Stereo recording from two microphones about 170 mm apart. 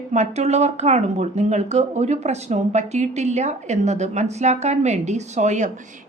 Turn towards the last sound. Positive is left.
turn(degrees=-45)  # may be behind; listen again after turning